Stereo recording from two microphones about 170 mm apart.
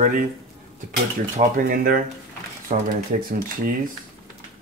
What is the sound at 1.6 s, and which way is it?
Speech, 55° right (ahead or behind).